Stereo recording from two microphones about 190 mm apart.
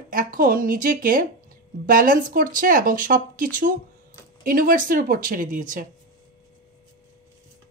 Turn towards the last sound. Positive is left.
turn(degrees=-45)  # may be behind; listen again after turning